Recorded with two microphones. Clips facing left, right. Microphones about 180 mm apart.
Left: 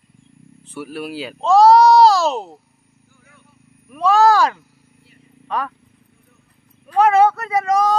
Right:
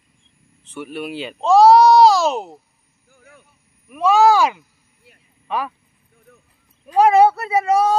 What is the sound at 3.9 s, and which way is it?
Speech, 5° right (ahead or behind).